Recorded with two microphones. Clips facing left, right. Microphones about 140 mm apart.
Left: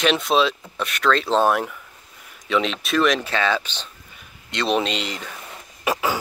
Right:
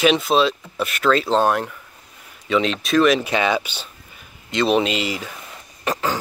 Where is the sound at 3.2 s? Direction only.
15° right (ahead or behind).